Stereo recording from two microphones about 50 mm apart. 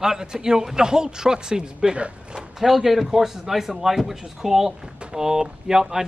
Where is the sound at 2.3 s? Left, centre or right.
Centre.